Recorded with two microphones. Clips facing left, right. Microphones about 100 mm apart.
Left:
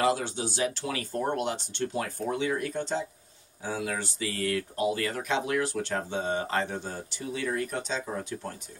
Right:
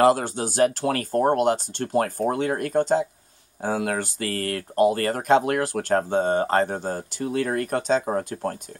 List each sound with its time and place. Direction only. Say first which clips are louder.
0.0 s speech: right 8 dB; 50° right (ahead or behind)